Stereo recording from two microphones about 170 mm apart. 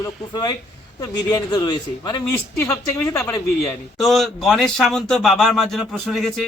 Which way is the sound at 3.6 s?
Centre (ahead or behind).